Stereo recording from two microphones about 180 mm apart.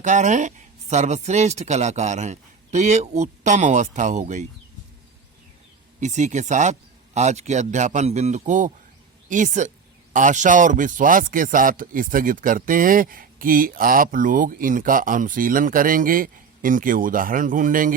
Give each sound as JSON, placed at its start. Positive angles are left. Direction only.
{"t": 0.0, "sound": "speech", "side_deg": -45}
{"t": 6.0, "sound": "speech", "side_deg": -40}